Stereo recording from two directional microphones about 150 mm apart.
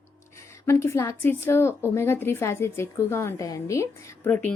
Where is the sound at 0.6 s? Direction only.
20° left (ahead or behind).